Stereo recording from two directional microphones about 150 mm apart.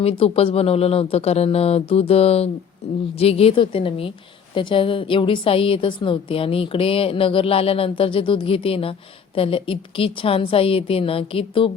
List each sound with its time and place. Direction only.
0.0 s a woman's voice: 40° left (ahead or behind)